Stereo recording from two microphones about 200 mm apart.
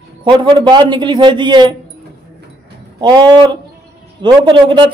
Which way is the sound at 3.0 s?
20° right (ahead or behind).